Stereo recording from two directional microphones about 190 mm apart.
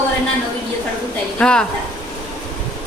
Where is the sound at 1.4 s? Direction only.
5° left (ahead or behind).